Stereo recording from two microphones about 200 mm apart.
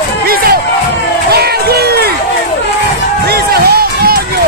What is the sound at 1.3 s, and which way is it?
Music, 50° right (ahead or behind).